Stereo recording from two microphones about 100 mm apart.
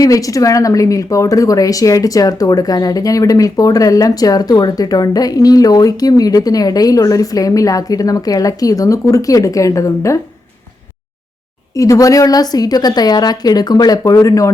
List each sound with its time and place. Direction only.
0.0 s a woman's voice: 35° left (ahead or behind)
11.7 s a woman's voice: 35° left (ahead or behind)